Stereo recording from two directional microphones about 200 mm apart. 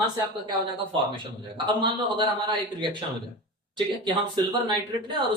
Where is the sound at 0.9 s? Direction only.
25° right (ahead or behind).